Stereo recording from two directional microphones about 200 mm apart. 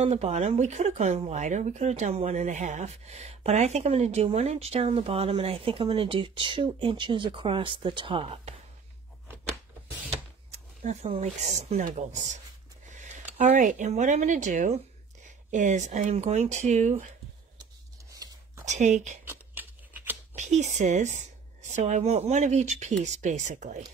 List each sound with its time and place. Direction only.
0.0 s speech: 30° right (ahead or behind)
10.5 s speech: 35° right (ahead or behind)
12.9 s a sound: 40° right (ahead or behind)
13.4 s speech: 35° right (ahead or behind)
18.7 s speech: 35° right (ahead or behind)
19.2 s scissors: 10° right (ahead or behind)
20.3 s speech: 35° right (ahead or behind)